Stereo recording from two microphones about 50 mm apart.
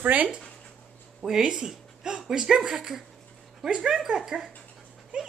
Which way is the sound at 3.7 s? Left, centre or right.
Centre.